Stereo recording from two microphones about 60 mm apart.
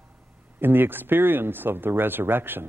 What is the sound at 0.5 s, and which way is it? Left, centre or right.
Speech, right.